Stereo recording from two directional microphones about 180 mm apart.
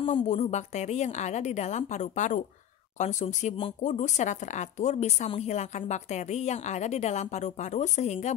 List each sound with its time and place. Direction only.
0.0 s speech: 35° left (ahead or behind)